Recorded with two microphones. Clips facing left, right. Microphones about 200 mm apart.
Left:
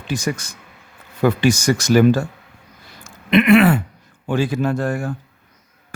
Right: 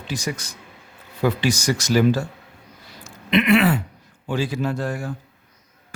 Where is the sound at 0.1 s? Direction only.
50° left (ahead or behind).